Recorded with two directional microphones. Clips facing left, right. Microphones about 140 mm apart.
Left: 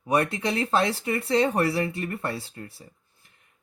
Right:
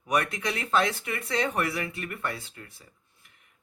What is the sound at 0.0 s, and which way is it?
Speech, 30° left (ahead or behind).